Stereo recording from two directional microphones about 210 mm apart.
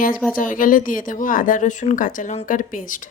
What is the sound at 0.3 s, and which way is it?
A woman's voice, 40° left (ahead or behind).